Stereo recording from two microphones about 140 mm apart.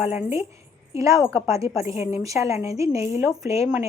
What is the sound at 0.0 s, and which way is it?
Speech, 15° right (ahead or behind).